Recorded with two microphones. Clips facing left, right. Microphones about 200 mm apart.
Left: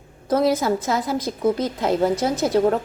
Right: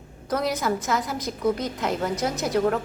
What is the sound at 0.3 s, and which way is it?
A woman's voice, 30° left (ahead or behind).